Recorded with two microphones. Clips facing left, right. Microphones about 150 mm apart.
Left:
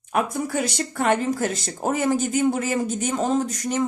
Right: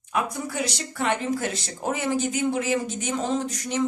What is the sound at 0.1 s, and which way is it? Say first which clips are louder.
Speech: left 4 dB; 50° left (ahead or behind).